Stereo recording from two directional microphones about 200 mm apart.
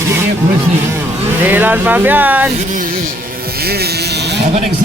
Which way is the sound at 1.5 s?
10° right (ahead or behind).